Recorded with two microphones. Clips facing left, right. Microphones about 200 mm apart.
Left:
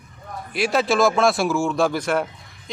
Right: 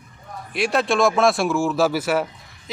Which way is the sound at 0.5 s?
Centre (ahead or behind).